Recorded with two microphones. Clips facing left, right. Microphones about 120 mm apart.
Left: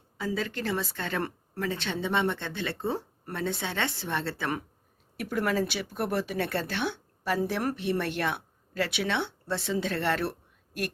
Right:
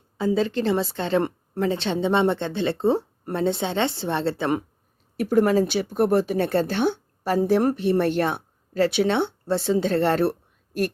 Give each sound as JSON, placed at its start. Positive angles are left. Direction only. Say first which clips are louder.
{"t": 0.2, "sound": "a woman's voice", "louder": "right 9 dB", "side_deg": -25}